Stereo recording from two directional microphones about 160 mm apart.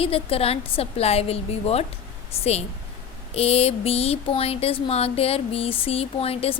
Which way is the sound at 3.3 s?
40° left (ahead or behind).